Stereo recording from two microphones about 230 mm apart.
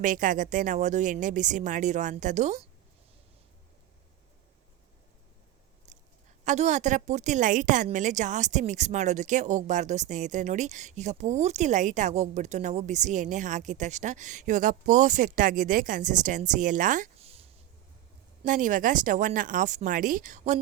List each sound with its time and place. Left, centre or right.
0.0 s a woman's voice: right
6.4 s a woman's voice: right